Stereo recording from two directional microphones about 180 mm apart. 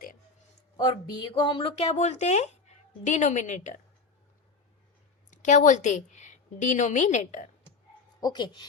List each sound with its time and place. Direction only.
0.8 s speech: 25° left (ahead or behind); by 3.8 s 40° left (ahead or behind)
5.3 s a woman's voice: 45° left (ahead or behind)
8.2 s speech: 25° left (ahead or behind)